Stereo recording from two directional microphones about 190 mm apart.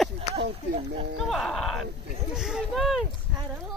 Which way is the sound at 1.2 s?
Centre (ahead or behind).